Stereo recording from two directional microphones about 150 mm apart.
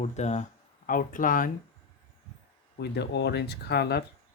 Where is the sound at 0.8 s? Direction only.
65° left (ahead or behind).